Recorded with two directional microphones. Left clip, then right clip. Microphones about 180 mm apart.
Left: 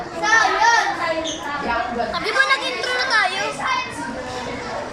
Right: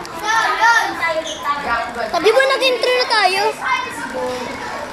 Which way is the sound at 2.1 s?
30° right (ahead or behind).